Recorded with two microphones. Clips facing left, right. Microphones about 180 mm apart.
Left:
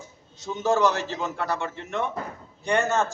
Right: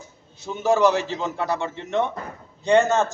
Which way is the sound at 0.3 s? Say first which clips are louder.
Right 3 dB; 10° right (ahead or behind).